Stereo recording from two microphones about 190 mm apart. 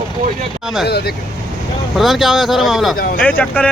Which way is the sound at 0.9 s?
55° left (ahead or behind).